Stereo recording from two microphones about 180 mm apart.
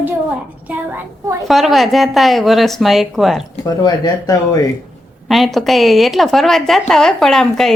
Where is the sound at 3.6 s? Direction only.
20° left (ahead or behind).